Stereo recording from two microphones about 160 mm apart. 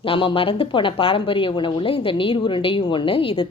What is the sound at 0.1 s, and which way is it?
A woman's voice, 35° left (ahead or behind).